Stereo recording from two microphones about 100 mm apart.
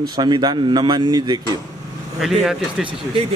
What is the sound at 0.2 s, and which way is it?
A man's voice, 50° right (ahead or behind).